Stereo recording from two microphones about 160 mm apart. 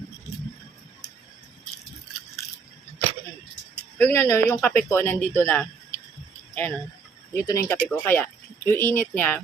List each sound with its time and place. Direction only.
3.9 s speech: 15° left (ahead or behind)
6.5 s a sound: 10° left (ahead or behind)
7.3 s speech: 20° left (ahead or behind)